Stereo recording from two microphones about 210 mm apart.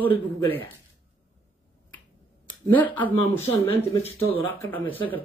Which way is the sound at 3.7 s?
30° left (ahead or behind).